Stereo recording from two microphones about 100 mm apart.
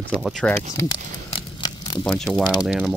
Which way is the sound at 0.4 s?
10° left (ahead or behind).